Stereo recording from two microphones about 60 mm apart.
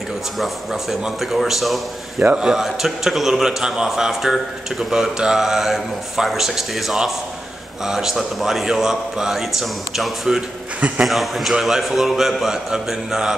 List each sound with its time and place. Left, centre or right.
0.4 s a man's voice: centre
2.2 s a man's voice: centre
2.5 s a man's voice: centre